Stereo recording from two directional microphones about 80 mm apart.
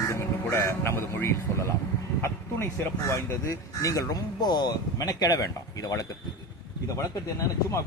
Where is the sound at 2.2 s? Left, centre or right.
Left.